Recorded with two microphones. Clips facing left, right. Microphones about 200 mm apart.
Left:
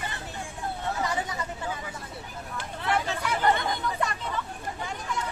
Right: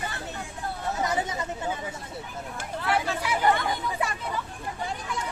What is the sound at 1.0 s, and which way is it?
Chatter, 20° right (ahead or behind).